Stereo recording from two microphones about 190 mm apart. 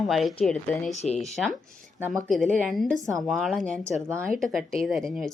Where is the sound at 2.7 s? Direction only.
Centre (ahead or behind).